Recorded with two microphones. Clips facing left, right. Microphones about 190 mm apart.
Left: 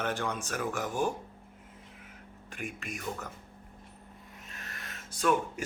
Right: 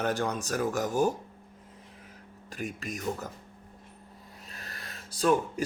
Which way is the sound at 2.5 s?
35° right (ahead or behind).